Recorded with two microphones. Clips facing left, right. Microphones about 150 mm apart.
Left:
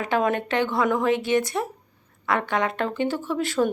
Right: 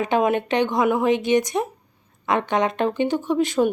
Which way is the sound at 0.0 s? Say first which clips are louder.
Right 3 dB; 20° right (ahead or behind).